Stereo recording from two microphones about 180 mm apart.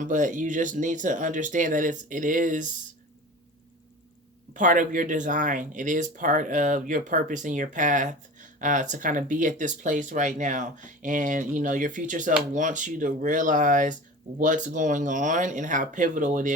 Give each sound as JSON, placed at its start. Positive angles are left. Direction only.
{"t": 0.0, "sound": "speech", "side_deg": -45}
{"t": 4.5, "sound": "speech", "side_deg": -45}